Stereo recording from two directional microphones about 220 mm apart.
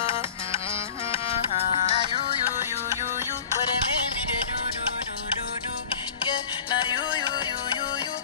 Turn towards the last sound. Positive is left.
turn(degrees=20)  # may be behind; listen again after turning